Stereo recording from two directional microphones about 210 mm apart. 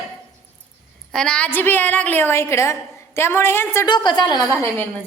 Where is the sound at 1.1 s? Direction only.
5° left (ahead or behind); by 4.4 s 20° left (ahead or behind).